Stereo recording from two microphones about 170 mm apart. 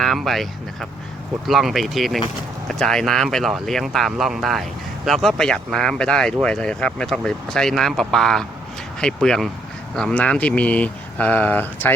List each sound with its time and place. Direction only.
0.0 s speech: centre (ahead or behind)